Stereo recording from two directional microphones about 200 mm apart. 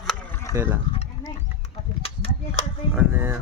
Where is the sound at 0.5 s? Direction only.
15° right (ahead or behind).